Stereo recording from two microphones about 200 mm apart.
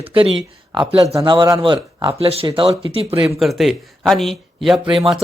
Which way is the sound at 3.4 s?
Centre (ahead or behind).